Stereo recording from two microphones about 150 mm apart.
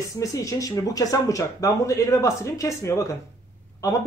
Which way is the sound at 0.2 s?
20° left (ahead or behind).